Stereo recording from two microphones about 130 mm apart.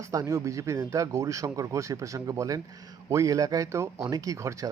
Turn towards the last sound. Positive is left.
turn(degrees=-25)  # may be behind; listen again after turning